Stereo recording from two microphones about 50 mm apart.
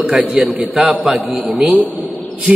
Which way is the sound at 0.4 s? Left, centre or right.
Centre.